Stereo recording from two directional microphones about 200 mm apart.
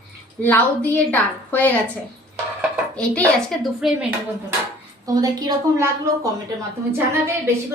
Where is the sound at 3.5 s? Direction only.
Centre (ahead or behind).